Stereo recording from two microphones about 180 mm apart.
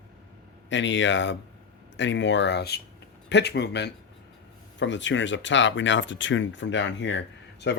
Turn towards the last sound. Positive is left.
turn(degrees=80)